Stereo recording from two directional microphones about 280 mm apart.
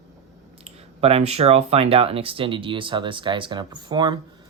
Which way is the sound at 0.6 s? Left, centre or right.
Right.